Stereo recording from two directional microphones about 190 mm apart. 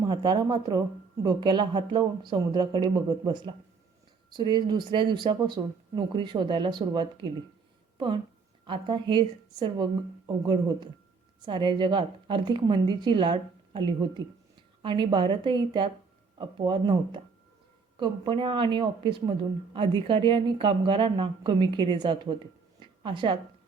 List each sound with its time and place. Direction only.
0.0 s a woman's voice: 20° right (ahead or behind)
18.3 s a woman's voice: 25° right (ahead or behind)